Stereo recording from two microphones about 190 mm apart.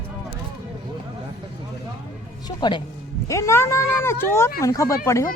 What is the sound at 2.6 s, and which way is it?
Speech, 25° left (ahead or behind).